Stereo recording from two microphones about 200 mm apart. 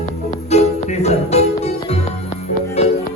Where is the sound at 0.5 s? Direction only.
35° left (ahead or behind).